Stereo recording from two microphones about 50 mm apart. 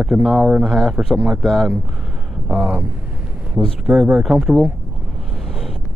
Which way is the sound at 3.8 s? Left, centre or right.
Centre.